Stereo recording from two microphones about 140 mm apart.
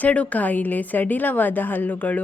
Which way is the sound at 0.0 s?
10° left (ahead or behind).